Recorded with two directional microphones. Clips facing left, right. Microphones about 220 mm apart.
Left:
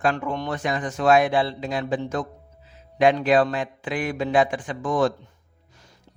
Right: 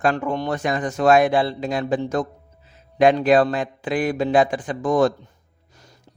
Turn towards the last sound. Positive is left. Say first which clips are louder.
# right 4 dB
turn(degrees=-40)  # may be behind; listen again after turning